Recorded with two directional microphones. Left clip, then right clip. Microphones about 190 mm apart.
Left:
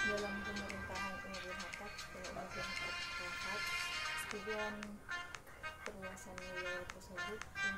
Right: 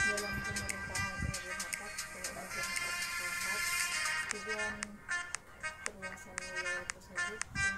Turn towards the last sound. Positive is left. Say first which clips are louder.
# right 5 dB
turn(degrees=-30)  # may be behind; listen again after turning